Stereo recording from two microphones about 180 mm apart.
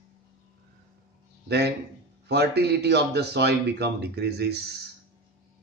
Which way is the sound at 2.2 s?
65° right (ahead or behind).